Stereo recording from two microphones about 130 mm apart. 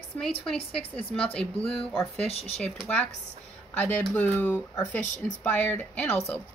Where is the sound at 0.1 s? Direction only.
15° left (ahead or behind).